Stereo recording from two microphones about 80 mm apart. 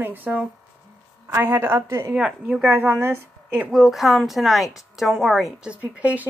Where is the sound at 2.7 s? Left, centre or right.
Right.